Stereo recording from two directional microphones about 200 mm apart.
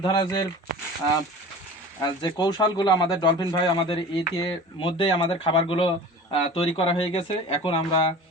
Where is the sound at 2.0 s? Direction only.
20° left (ahead or behind).